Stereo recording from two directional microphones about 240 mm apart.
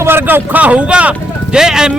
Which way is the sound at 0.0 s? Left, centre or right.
Centre.